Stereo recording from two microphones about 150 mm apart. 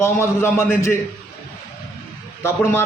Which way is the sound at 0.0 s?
15° left (ahead or behind).